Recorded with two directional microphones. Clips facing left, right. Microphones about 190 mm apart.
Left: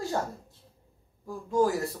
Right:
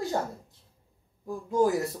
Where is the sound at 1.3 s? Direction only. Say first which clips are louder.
Right 1 dB; 20° right (ahead or behind).